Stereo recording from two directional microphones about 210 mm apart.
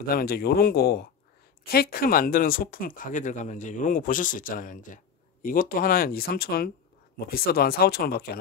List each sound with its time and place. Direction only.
0.0 s speech: 45° left (ahead or behind)